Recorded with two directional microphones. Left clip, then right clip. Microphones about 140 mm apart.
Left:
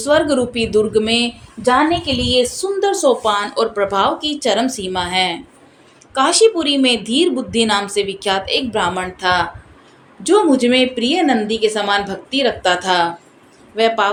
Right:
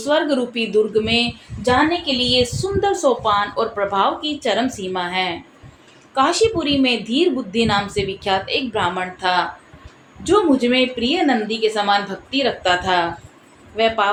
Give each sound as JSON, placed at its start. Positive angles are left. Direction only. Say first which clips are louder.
{"t": 0.0, "sound": "a woman's voice", "louder": "left 4 dB", "side_deg": 40}